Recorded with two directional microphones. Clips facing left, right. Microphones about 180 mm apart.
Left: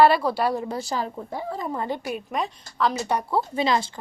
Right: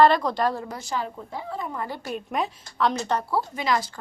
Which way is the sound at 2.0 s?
5° left (ahead or behind).